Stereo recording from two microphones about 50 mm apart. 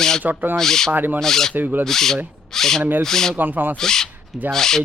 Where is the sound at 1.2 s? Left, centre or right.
Centre.